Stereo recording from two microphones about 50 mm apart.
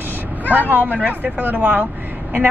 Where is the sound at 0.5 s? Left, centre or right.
Right.